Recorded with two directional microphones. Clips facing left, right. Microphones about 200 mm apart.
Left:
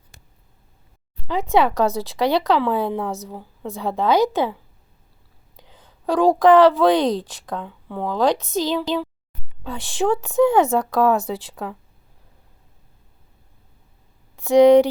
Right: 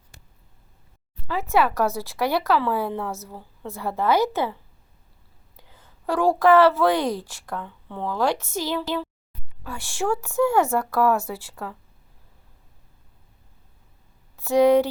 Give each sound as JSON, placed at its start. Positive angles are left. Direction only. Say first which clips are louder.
{"t": 1.3, "sound": "speech", "louder": "left 3 dB", "side_deg": 15}
{"t": 5.5, "sound": "a woman's voice", "louder": "left 3 dB", "side_deg": 15}
{"t": 14.3, "sound": "speech", "louder": "left 5 dB", "side_deg": 15}